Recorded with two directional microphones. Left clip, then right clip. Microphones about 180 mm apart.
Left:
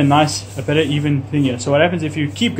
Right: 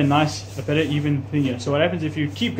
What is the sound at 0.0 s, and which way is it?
Speech, 45° left (ahead or behind).